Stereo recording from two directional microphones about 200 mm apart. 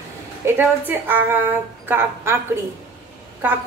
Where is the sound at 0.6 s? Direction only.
10° right (ahead or behind).